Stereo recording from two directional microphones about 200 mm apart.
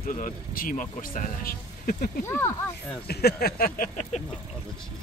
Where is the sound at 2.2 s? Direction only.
15° left (ahead or behind).